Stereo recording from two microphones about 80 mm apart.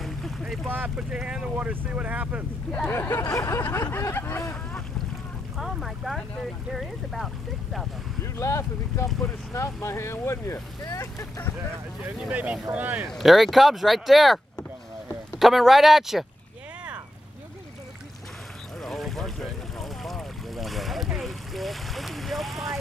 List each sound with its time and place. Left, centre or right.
0.0 s boat: centre
0.7 s speech: right
0.9 s speech: centre
2.9 s speech: left
3.9 s speech: left
5.6 s speech: centre
8.2 s speech: left
12.3 s speech: centre
13.1 s speech: centre
18.8 s boat: centre